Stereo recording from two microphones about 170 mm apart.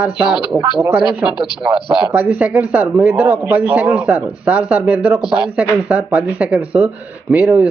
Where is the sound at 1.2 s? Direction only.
25° left (ahead or behind).